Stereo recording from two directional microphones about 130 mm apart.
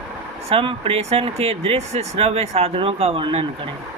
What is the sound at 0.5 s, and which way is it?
Speech, 45° right (ahead or behind).